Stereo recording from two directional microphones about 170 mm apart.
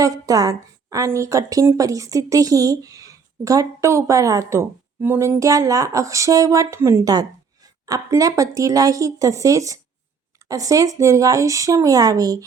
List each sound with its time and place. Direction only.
0.0 s a woman's voice: 20° right (ahead or behind)